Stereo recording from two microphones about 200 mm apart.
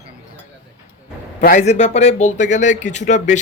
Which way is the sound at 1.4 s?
40° left (ahead or behind).